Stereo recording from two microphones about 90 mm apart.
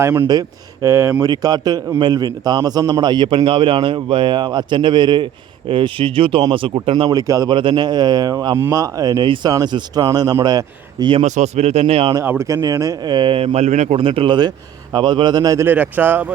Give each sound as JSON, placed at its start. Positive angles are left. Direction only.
{"t": 0.0, "sound": "speech", "side_deg": -25}
{"t": 0.3, "sound": "a man's voice", "side_deg": -50}
{"t": 0.9, "sound": "speech", "side_deg": -25}
{"t": 1.2, "sound": "a man's voice", "side_deg": -45}
{"t": 6.5, "sound": "speech", "side_deg": -70}
{"t": 7.1, "sound": "a man's voice", "side_deg": -40}
{"t": 7.5, "sound": "a man's voice", "side_deg": -65}
{"t": 9.2, "sound": "speech", "side_deg": -65}
{"t": 9.5, "sound": "a man's voice", "side_deg": -45}
{"t": 11.9, "sound": "speech", "side_deg": -90}
{"t": 12.2, "sound": "speech", "side_deg": -25}
{"t": 12.6, "sound": "speech", "side_deg": -40}
{"t": 13.1, "sound": "a man's voice", "side_deg": -65}
{"t": 15.5, "sound": "speech", "side_deg": -20}